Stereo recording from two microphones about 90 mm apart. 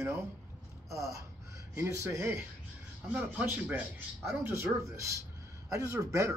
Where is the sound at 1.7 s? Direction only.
30° right (ahead or behind).